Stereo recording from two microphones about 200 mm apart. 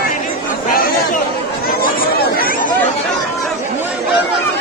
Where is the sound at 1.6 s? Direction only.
45° left (ahead or behind).